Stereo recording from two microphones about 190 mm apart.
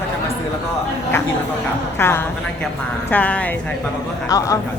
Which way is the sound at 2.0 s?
10° left (ahead or behind).